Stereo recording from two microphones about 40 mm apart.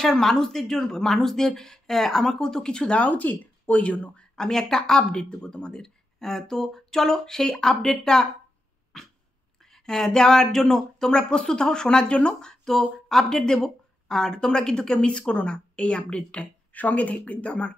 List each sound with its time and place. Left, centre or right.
0.2 s speech: centre
3.0 s speech: left
4.4 s speech: centre
7.5 s speech: centre
7.8 s speech: centre
9.6 s speech: centre; by 12.4 s left
12.4 s speech: centre
16.7 s speech: left